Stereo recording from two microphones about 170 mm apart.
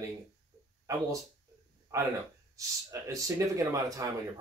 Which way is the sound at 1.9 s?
20° right (ahead or behind).